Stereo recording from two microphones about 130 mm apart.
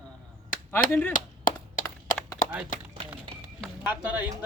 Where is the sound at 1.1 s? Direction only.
90° left.